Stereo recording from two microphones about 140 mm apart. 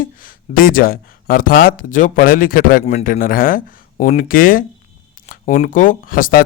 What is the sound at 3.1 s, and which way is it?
Speech, 80° left.